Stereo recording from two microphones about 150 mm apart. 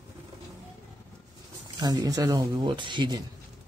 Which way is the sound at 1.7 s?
25° right (ahead or behind).